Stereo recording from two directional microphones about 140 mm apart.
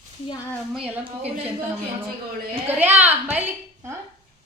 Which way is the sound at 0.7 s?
10° right (ahead or behind).